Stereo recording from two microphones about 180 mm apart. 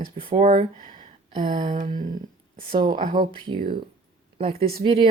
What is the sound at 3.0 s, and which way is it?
Speech, 50° right (ahead or behind).